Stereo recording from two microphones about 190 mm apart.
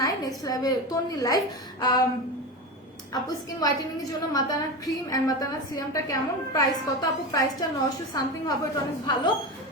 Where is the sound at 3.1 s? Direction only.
20° left (ahead or behind).